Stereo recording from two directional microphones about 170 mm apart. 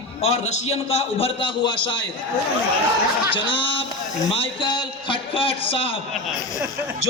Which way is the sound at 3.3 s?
30° left (ahead or behind).